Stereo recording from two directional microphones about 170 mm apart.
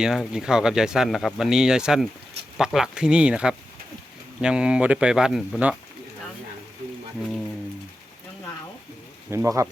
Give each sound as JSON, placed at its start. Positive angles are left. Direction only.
{"t": 0.0, "sound": "speech", "side_deg": -5}
{"t": 9.3, "sound": "speech", "side_deg": -15}